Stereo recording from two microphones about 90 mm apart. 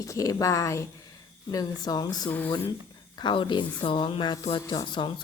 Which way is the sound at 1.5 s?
45° left (ahead or behind).